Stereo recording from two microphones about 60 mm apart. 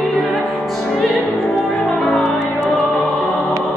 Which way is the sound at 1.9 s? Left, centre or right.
Left.